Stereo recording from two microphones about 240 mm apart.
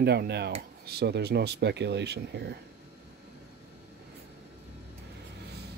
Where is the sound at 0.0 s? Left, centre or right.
Right.